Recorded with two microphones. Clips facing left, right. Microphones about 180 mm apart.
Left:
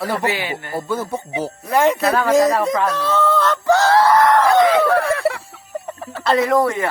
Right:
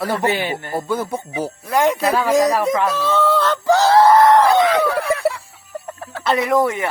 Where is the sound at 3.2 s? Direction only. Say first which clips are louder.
Even; 10° right (ahead or behind).